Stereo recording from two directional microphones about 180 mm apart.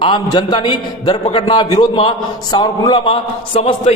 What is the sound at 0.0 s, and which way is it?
A man's voice, 25° left (ahead or behind).